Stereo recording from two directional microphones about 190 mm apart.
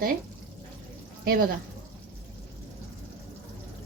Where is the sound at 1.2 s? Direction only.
50° right (ahead or behind).